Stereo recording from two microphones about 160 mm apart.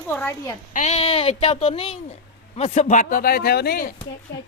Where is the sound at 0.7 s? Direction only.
45° left (ahead or behind); by 4.4 s 80° left.